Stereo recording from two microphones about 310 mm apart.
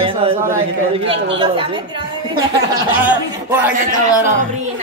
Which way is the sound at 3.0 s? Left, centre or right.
Centre.